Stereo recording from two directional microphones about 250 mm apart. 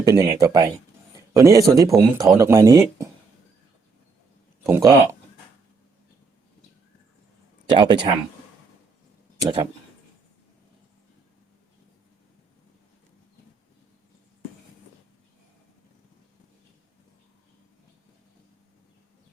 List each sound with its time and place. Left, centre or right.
0.0 s speech: centre
4.6 s speech: centre
7.7 s speech: centre
9.4 s speech: right